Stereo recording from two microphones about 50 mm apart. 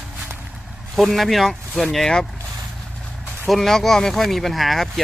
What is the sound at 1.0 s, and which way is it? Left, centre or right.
Speech, centre.